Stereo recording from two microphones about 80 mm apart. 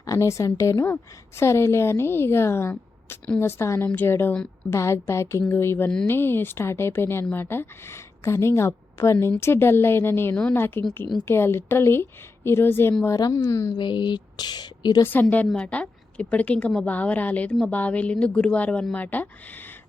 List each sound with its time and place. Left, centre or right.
0.0 s a woman's voice: left
13.1 s a woman's voice: left
13.5 s speech: left
13.7 s speech: left
15.0 s a woman's voice: left